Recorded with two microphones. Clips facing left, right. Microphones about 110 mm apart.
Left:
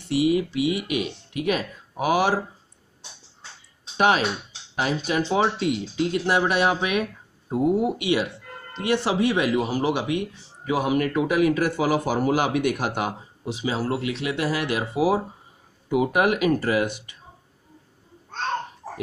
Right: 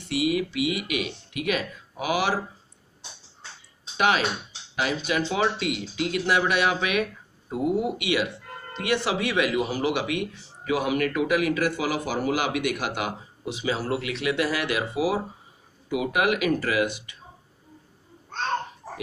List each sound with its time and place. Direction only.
0.1 s speech: 35° left (ahead or behind)
3.9 s a sound: 40° left (ahead or behind)
4.7 s speech: 40° left (ahead or behind)